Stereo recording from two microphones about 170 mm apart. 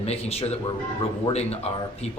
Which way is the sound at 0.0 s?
40° left (ahead or behind).